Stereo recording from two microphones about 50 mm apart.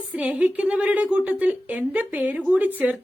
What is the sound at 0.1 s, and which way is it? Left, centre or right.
A woman's voice, right.